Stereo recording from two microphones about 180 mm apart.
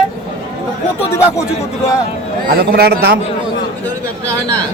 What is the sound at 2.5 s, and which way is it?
Speech, 55° right (ahead or behind).